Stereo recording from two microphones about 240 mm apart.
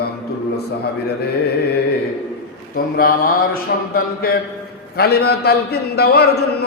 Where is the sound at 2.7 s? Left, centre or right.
Left.